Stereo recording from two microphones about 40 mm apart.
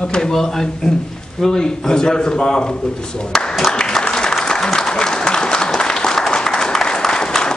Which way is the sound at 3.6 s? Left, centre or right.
Centre.